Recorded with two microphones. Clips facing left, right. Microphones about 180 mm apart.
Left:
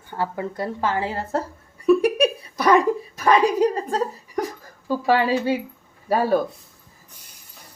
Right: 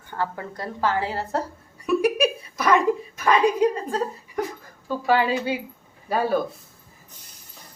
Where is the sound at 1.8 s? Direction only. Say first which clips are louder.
Left 4 dB; 35° left (ahead or behind).